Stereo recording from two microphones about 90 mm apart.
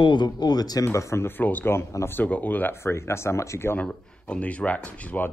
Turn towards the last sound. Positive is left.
turn(degrees=20)  # may be behind; listen again after turning